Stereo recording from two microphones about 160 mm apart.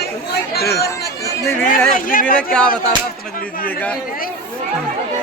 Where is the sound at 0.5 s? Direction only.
85° left.